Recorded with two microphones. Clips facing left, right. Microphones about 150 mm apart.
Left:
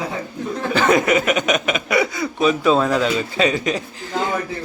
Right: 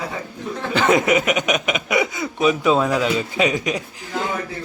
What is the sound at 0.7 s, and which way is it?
Speech, 20° right (ahead or behind).